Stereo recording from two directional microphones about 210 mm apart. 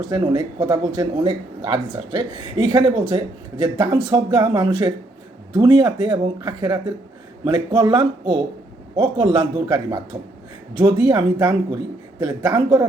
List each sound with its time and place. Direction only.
0.1 s speech: 20° right (ahead or behind)